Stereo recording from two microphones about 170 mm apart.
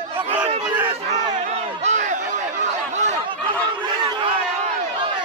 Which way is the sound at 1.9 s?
45° right (ahead or behind).